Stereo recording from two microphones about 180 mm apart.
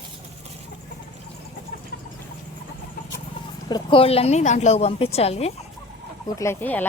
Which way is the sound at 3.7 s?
30° left (ahead or behind).